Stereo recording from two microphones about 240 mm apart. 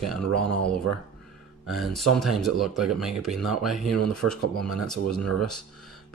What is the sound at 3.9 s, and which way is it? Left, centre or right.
Speech, right.